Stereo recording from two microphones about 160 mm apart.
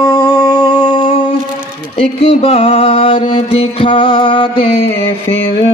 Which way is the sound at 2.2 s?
40° left (ahead or behind).